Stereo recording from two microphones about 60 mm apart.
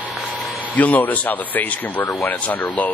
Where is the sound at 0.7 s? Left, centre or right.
Left.